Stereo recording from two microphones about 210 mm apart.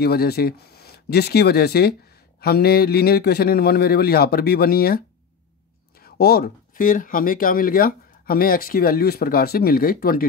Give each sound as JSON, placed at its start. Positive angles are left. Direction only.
{"t": 0.0, "sound": "speech", "side_deg": 45}